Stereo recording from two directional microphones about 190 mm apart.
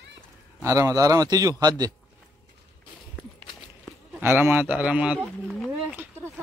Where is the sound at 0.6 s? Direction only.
15° right (ahead or behind).